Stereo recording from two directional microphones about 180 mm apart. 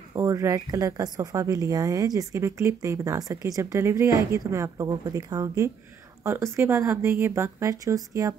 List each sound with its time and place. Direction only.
0.1 s speech: 15° right (ahead or behind)